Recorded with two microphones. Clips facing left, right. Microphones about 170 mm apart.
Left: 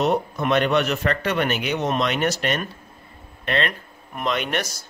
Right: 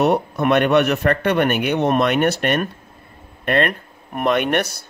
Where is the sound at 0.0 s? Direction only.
60° right (ahead or behind).